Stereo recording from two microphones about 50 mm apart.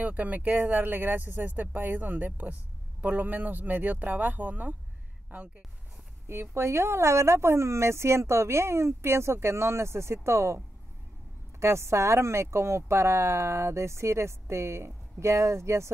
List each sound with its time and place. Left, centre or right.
0.0 s speech: right
6.2 s speech: right
11.6 s speech: right